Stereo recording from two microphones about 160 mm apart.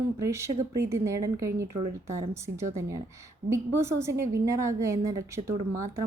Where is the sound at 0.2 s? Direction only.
15° right (ahead or behind).